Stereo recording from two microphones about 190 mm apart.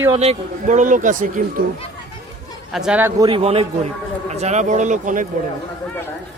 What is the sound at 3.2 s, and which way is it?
Speech, 30° right (ahead or behind).